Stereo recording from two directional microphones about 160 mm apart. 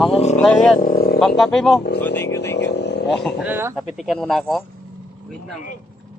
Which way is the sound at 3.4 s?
10° right (ahead or behind).